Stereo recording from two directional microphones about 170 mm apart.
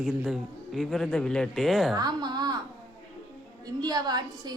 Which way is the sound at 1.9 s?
25° right (ahead or behind).